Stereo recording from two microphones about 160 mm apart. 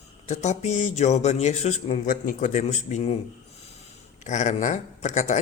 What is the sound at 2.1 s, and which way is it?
Speech, 55° left (ahead or behind).